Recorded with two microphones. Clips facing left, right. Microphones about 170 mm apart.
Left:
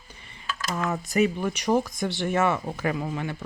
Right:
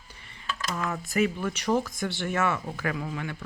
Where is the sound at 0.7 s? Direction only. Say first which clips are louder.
Left 4 dB; 25° left (ahead or behind).